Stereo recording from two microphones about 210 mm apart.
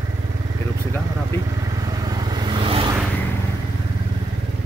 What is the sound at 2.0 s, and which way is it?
Vehicle, 20° right (ahead or behind).